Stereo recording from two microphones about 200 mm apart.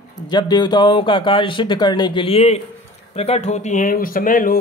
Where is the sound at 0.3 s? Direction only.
20° left (ahead or behind).